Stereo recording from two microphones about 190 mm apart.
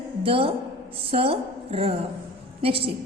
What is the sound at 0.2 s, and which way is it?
A woman's voice, 30° right (ahead or behind).